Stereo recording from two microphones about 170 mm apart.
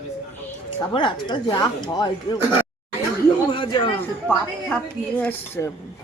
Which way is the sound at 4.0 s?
10° left (ahead or behind).